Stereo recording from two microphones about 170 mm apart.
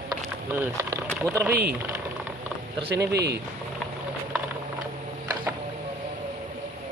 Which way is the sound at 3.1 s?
75° right (ahead or behind).